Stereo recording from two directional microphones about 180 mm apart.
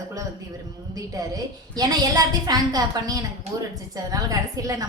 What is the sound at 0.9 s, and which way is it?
A woman's voice, 20° right (ahead or behind).